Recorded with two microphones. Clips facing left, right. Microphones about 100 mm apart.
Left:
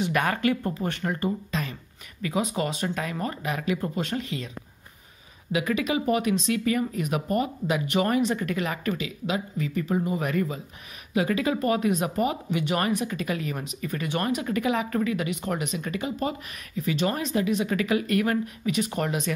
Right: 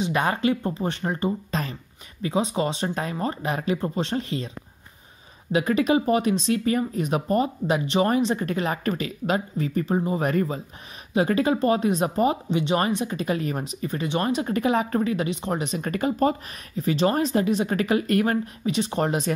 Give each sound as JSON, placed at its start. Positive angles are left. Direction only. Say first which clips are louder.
{"t": 0.0, "sound": "speech", "louder": "right 1 dB", "side_deg": -20}
{"t": 1.5, "sound": "speech", "louder": "right 2 dB", "side_deg": -35}
{"t": 5.5, "sound": "speech", "louder": "right 5 dB", "side_deg": -35}
{"t": 15.8, "sound": "speech", "louder": "right 6 dB", "side_deg": -45}